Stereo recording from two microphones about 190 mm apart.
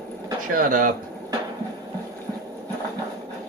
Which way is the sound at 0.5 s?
45° right (ahead or behind).